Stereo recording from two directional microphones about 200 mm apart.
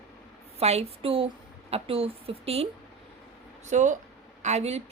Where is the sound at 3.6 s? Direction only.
35° right (ahead or behind).